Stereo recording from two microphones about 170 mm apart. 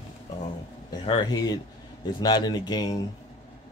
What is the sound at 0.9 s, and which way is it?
Speech, 25° left (ahead or behind).